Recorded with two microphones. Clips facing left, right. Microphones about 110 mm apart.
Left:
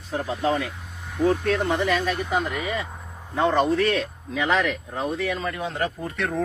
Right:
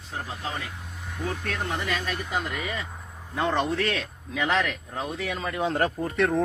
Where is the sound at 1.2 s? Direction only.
35° left (ahead or behind).